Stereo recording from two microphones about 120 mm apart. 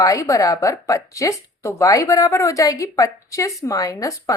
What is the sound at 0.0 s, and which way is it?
Speech, 25° left (ahead or behind).